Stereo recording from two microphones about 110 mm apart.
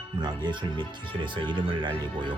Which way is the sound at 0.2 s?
40° right (ahead or behind).